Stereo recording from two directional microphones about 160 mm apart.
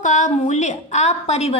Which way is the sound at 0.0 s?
50° left (ahead or behind).